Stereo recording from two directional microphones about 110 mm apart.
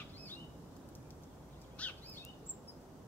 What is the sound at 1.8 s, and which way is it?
Bird, 10° left (ahead or behind).